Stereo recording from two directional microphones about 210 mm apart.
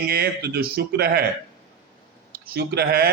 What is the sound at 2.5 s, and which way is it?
Speech, 50° right (ahead or behind).